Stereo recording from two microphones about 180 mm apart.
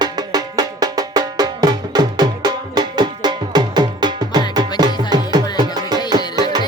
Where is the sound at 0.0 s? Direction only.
20° right (ahead or behind).